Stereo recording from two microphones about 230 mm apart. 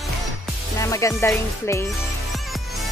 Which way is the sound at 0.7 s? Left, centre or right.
Centre.